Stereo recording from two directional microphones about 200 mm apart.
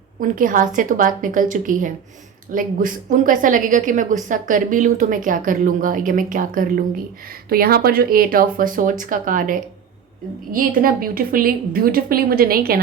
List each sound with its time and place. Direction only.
0.2 s a woman's voice: 40° right (ahead or behind)